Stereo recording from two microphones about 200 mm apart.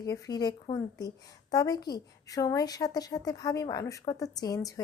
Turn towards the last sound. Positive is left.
turn(degrees=20)  # may be behind; listen again after turning